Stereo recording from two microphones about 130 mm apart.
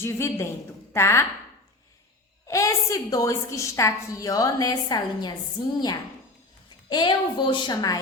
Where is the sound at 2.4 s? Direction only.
25° left (ahead or behind).